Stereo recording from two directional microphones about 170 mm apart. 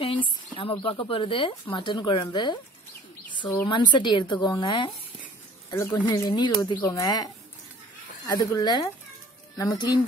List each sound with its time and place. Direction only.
0.0 s speech: 30° left (ahead or behind)
3.6 s speech: 30° left (ahead or behind)
5.7 s a woman's voice: 15° left (ahead or behind)